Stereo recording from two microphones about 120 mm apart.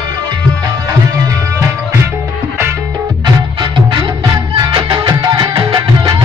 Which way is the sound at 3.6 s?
40° right (ahead or behind).